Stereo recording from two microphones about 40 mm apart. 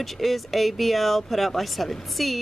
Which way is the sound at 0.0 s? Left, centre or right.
Centre.